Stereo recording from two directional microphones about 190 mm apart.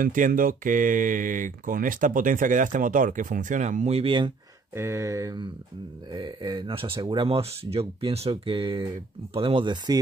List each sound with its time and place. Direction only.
0.0 s speech: 45° right (ahead or behind); by 4.3 s 25° right (ahead or behind)
4.7 s a sound: 15° right (ahead or behind)
6.1 s speech: 25° right (ahead or behind)